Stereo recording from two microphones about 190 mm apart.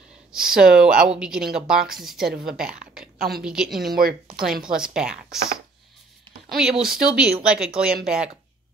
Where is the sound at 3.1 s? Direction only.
55° right (ahead or behind).